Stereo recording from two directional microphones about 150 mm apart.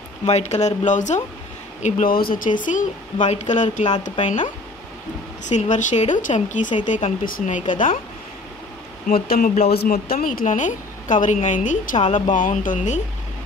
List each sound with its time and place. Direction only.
0.3 s speech: 50° left (ahead or behind)
2.0 s speech: 75° left (ahead or behind)
2.6 s speech: 55° left (ahead or behind)
9.1 s speech: 70° left (ahead or behind); by 13.0 s 55° left (ahead or behind)